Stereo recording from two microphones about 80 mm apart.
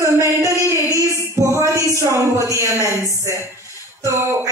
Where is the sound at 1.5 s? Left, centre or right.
Right.